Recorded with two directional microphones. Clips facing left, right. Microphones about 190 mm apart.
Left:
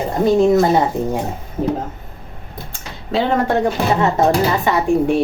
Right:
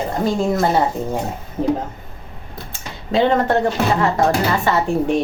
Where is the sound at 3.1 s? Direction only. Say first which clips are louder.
Right 1 dB; 5° left (ahead or behind).